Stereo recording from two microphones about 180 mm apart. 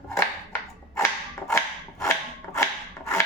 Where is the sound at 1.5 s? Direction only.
15° left (ahead or behind).